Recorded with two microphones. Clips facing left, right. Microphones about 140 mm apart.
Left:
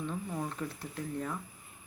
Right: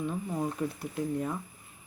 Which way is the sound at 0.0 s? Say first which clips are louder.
Right 4 dB; 15° right (ahead or behind).